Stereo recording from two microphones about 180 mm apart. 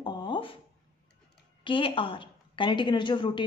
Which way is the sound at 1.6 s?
30° left (ahead or behind).